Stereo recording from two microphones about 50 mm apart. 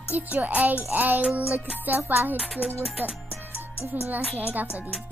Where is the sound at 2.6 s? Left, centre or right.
Left.